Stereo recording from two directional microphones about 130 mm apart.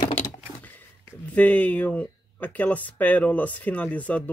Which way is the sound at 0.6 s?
15° left (ahead or behind).